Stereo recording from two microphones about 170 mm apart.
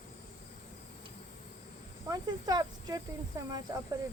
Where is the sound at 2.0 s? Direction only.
20° right (ahead or behind).